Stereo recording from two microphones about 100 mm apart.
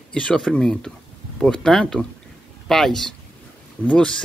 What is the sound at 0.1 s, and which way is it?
A man's voice, 5° left (ahead or behind).